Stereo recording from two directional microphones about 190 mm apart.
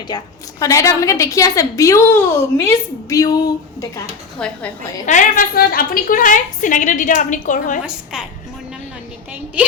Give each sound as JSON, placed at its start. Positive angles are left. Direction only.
{"t": 0.1, "sound": "a woman's voice", "side_deg": 20}
{"t": 4.4, "sound": "speech", "side_deg": 5}
{"t": 5.0, "sound": "a woman's voice", "side_deg": 40}